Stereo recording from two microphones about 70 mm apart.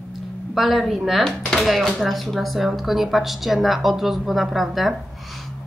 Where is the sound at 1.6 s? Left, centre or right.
Centre.